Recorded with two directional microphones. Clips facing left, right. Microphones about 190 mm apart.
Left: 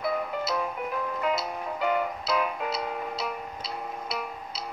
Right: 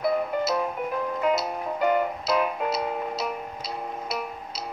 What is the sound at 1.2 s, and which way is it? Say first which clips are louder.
Music: right 5 dB; 45° right (ahead or behind).